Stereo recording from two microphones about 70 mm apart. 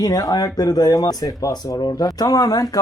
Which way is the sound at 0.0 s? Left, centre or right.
Left.